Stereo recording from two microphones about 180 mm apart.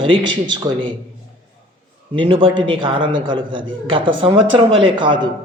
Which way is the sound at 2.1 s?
30° right (ahead or behind).